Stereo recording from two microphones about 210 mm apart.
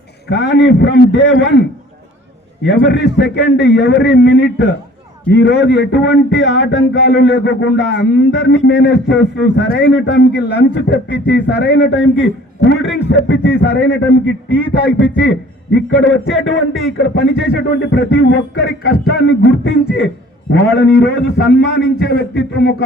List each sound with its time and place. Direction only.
0.3 s speech: 55° left (ahead or behind)
2.6 s speech: 55° left (ahead or behind)
22.0 s a sound: 50° left (ahead or behind)